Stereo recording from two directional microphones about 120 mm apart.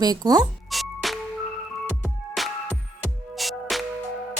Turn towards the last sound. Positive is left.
turn(degrees=0)  # may be behind; listen again after turning